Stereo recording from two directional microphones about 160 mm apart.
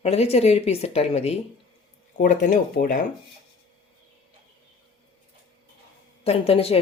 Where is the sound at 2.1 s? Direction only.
50° left (ahead or behind).